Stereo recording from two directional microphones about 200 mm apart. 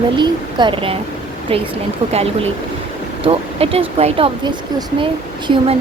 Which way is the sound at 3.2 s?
30° right (ahead or behind).